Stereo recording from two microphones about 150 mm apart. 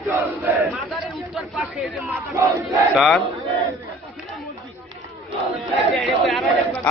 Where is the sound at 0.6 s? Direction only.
Centre (ahead or behind); by 2.6 s 15° right (ahead or behind).